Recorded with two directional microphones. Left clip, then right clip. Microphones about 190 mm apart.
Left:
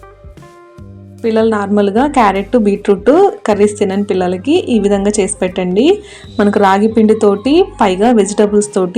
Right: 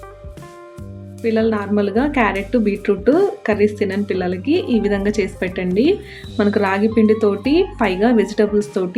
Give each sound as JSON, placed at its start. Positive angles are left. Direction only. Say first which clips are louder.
{"t": 1.2, "sound": "a woman's voice", "louder": "left 6 dB", "side_deg": 20}